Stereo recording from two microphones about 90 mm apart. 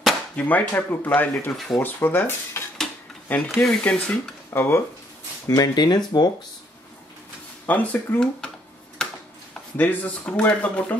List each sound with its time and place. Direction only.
0.4 s speech: 20° left (ahead or behind)
4.5 s speech: 25° left (ahead or behind)
5.5 s speech: 50° left (ahead or behind)
7.6 s speech: 20° left (ahead or behind)
8.9 s a sound: 5° left (ahead or behind)
9.8 s speech: 15° left (ahead or behind)